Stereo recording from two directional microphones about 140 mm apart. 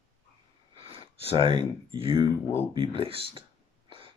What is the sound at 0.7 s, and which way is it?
Speech, 40° right (ahead or behind).